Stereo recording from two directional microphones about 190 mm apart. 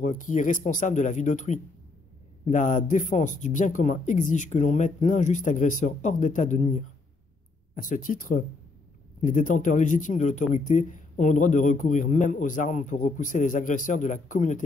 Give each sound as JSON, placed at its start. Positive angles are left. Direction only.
{"t": 0.0, "sound": "a man's voice", "side_deg": 40}
{"t": 7.7, "sound": "a man's voice", "side_deg": 45}